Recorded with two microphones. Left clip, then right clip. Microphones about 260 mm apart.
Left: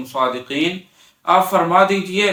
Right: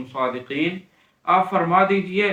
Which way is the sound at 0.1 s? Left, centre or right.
Centre.